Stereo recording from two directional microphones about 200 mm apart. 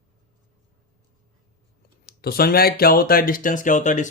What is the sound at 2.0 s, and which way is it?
Speech, 50° left (ahead or behind).